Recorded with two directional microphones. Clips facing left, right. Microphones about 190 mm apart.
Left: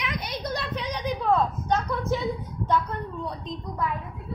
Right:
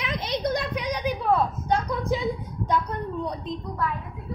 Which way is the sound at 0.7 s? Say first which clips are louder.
Right 2 dB; 10° right (ahead or behind).